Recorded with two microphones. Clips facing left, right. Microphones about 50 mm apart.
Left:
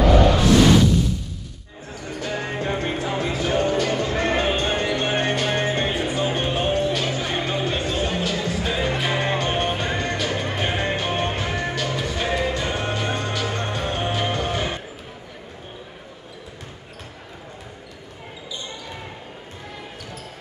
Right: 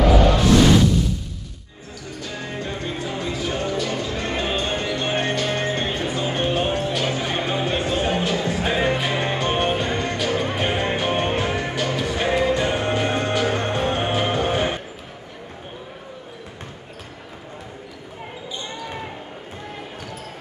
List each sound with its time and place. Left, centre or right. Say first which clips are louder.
2.2 s music: left 4 dB; left
4.3 s basketball bounce: left 1 dB; centre
4.9 s music: left 1 dB; centre; by 8.9 s right
8.9 s music: even; centre